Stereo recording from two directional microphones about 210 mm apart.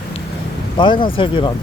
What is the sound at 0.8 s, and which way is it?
Speech, 25° left (ahead or behind).